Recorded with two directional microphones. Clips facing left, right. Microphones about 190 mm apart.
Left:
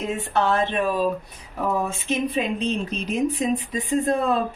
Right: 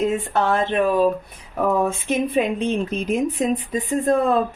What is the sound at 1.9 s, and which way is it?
Speech, 55° right (ahead or behind).